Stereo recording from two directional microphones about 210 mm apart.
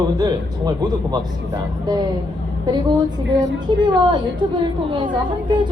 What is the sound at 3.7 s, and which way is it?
Speech, 25° right (ahead or behind).